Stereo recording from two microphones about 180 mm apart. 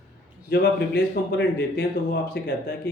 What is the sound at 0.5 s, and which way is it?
Speech, 65° left (ahead or behind).